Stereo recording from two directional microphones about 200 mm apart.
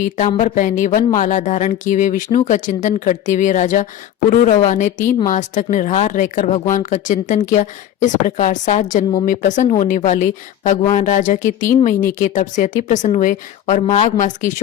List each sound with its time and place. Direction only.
0.2 s speech: 40° left (ahead or behind)